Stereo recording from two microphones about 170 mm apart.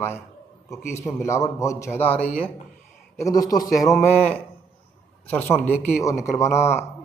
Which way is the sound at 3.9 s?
10° left (ahead or behind).